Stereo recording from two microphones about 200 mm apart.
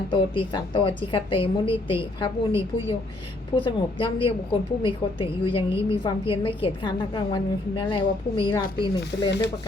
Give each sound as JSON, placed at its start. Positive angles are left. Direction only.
{"t": 0.1, "sound": "a woman's voice", "side_deg": 25}